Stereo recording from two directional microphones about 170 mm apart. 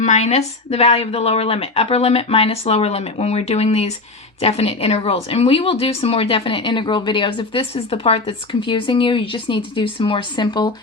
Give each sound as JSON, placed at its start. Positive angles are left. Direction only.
{"t": 0.0, "sound": "speech", "side_deg": 40}